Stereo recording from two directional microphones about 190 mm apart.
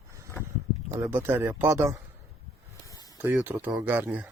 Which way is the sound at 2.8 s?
20° left (ahead or behind).